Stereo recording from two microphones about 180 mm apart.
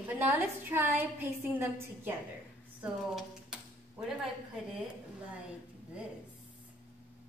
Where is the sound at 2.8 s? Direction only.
5° right (ahead or behind).